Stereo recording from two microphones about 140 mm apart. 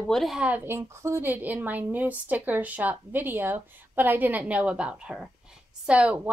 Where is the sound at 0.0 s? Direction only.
Centre (ahead or behind).